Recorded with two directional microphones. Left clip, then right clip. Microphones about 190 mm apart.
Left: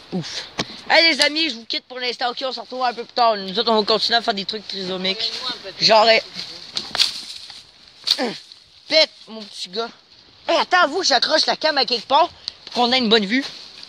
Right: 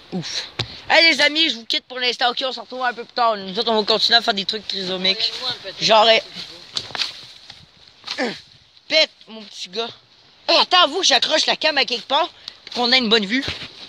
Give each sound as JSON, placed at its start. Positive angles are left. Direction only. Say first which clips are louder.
{"t": 0.1, "sound": "speech", "louder": "right 2 dB", "side_deg": 5}
{"t": 2.4, "sound": "speech", "louder": "even", "side_deg": -5}
{"t": 6.7, "sound": "a sound", "louder": "even", "side_deg": -50}
{"t": 8.8, "sound": "speech", "louder": "left 1 dB", "side_deg": 10}